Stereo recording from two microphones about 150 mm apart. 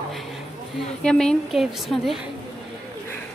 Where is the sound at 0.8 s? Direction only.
5° left (ahead or behind).